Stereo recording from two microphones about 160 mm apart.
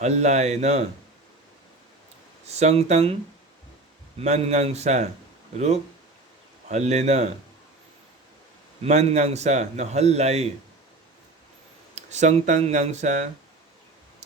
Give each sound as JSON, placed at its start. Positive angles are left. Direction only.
{"t": 0.0, "sound": "a man's voice", "side_deg": -45}
{"t": 2.5, "sound": "a man's voice", "side_deg": -45}
{"t": 4.2, "sound": "a man's voice", "side_deg": -45}
{"t": 8.8, "sound": "a man's voice", "side_deg": -45}
{"t": 11.9, "sound": "a man's voice", "side_deg": -45}